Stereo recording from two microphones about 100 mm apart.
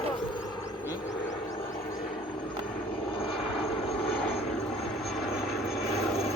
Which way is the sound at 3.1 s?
70° left (ahead or behind).